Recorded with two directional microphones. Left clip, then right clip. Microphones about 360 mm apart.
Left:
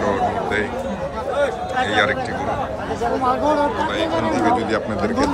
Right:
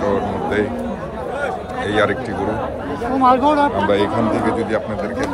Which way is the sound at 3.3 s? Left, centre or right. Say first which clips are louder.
Right 5 dB; centre.